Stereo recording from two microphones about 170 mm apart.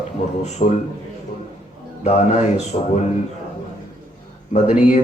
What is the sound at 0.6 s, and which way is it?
Speech, 35° left (ahead or behind).